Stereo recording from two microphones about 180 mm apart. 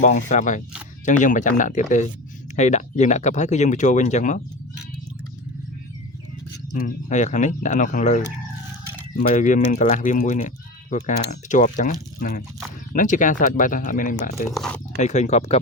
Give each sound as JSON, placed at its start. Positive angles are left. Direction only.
{"t": 0.0, "sound": "speech", "side_deg": 45}
{"t": 6.7, "sound": "speech", "side_deg": 45}